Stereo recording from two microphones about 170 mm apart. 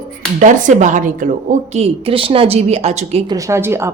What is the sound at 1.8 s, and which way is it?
A woman's voice, 35° right (ahead or behind).